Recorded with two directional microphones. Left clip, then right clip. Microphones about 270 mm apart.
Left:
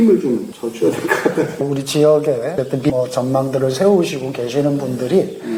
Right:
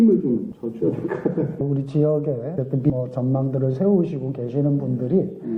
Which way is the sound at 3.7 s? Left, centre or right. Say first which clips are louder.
Left 6 dB; centre.